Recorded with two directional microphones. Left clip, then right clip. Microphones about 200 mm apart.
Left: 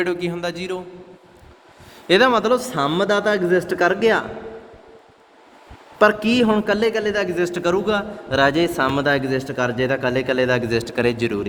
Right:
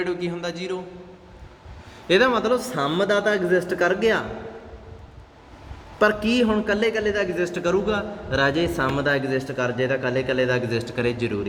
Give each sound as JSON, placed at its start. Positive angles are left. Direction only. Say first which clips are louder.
{"t": 0.0, "sound": "a man's voice", "louder": "left 4 dB", "side_deg": 45}
{"t": 2.0, "sound": "a man's voice", "louder": "left 3 dB", "side_deg": 55}
{"t": 6.0, "sound": "a man's voice", "louder": "left 4 dB", "side_deg": 45}